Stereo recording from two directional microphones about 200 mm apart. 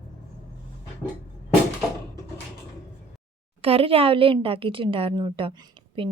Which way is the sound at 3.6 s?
30° right (ahead or behind).